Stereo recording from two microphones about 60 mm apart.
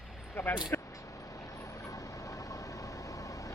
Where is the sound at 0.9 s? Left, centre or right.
Left.